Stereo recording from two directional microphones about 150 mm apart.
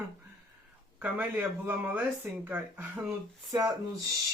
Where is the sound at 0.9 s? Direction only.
10° right (ahead or behind).